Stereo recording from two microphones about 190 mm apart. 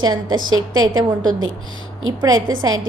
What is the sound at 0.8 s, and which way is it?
A woman's voice, 20° right (ahead or behind).